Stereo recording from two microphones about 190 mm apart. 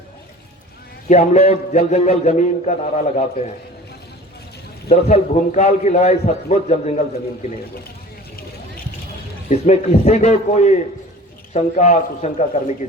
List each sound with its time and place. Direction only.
1.0 s a man's voice: 35° left (ahead or behind)
5.0 s a man's voice: 35° left (ahead or behind)
9.5 s a man's voice: 35° left (ahead or behind)